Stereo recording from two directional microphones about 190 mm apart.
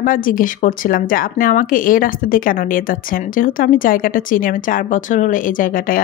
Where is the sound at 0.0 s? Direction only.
45° left (ahead or behind).